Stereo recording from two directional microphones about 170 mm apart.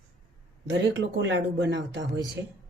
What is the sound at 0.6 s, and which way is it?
Speech, 90° right.